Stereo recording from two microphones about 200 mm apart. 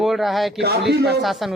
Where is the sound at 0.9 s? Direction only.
55° right (ahead or behind).